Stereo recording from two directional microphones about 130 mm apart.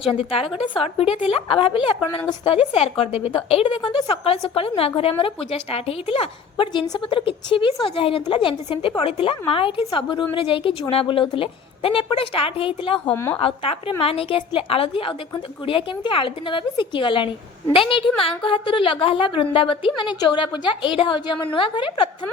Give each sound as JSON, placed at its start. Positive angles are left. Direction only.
{"t": 0.0, "sound": "a woman's voice", "side_deg": 45}
{"t": 13.1, "sound": "a woman's voice", "side_deg": 15}
{"t": 13.4, "sound": "a woman's voice", "side_deg": 45}